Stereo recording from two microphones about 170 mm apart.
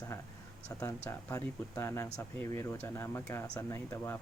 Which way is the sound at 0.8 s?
20° left (ahead or behind).